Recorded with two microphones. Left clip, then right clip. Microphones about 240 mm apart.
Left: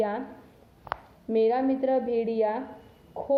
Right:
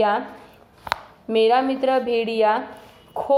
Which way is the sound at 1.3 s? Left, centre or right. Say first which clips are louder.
Right 6 dB; centre.